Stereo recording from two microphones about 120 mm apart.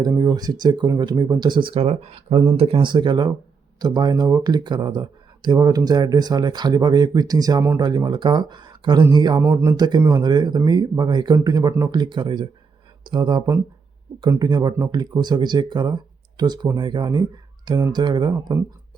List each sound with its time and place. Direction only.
0.0 s speech: 35° right (ahead or behind)
1.8 s speech: 60° right (ahead or behind); by 9.4 s 40° right (ahead or behind)
9.4 s speech: 20° right (ahead or behind)
9.7 s speech: 35° right (ahead or behind)
11.9 s speech: 40° right (ahead or behind)